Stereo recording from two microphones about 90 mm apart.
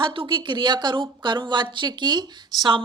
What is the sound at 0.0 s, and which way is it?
Speech, 65° right (ahead or behind).